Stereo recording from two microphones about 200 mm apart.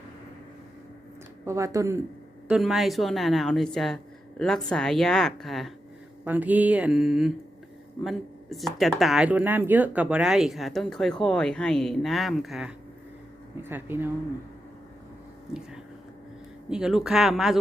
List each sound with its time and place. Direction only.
1.5 s speech: 15° right (ahead or behind)
2.5 s speech: centre (ahead or behind)
16.6 s speech: 5° right (ahead or behind)